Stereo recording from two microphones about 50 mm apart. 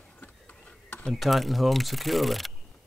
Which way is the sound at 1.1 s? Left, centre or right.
Centre.